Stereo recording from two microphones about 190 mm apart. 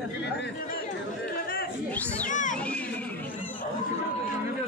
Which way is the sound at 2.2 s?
40° left (ahead or behind).